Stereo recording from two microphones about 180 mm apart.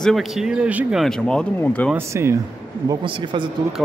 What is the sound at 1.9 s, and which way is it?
Speech, 15° right (ahead or behind).